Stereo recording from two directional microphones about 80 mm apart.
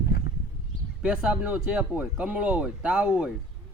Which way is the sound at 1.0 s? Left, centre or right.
Centre.